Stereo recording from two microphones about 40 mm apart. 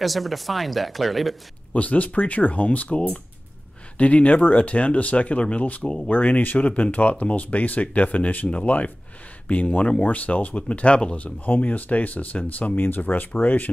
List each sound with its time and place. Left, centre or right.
0.0 s speech: centre
1.7 s speech: left
5.8 s speech: centre
6.0 s speech: left
12.7 s speech: left